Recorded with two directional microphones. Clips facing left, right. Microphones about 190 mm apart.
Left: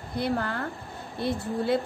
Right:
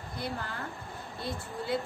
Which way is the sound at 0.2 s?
65° left (ahead or behind).